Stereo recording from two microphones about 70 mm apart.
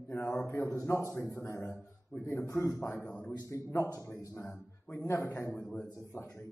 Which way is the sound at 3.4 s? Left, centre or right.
Left.